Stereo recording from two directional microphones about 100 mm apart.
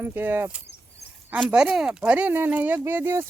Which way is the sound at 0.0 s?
20° right (ahead or behind).